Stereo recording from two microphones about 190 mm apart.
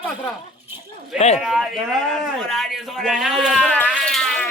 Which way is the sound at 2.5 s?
Centre (ahead or behind).